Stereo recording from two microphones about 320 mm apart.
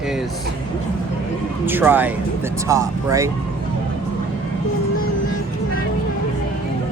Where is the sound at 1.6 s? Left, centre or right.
Centre.